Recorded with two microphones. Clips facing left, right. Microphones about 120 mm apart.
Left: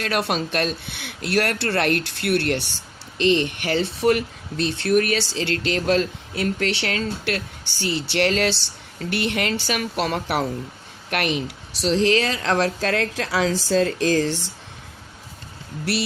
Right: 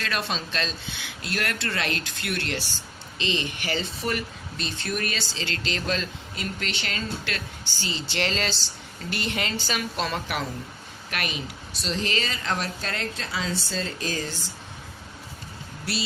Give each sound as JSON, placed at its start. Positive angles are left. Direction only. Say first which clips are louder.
{"t": 0.0, "sound": "speech", "louder": "left 7 dB", "side_deg": 60}
{"t": 15.9, "sound": "speech", "louder": "left 7 dB", "side_deg": 80}